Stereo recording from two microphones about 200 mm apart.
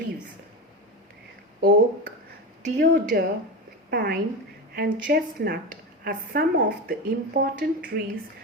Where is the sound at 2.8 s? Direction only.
50° right (ahead or behind).